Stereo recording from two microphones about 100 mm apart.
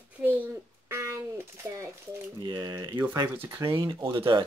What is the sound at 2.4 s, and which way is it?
Speech, 45° right (ahead or behind).